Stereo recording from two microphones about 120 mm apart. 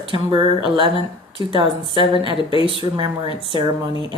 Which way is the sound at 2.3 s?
45° left (ahead or behind).